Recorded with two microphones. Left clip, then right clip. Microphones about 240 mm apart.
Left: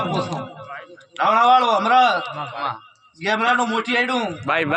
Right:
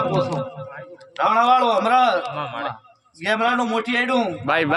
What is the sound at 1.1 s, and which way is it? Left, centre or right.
A man's voice, centre.